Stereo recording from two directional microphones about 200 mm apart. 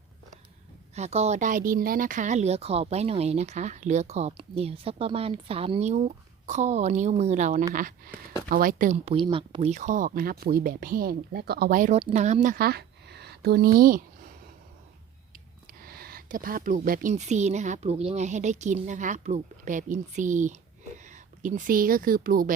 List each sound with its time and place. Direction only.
0.9 s a woman's voice: 35° right (ahead or behind)
15.8 s speech: 50° right (ahead or behind)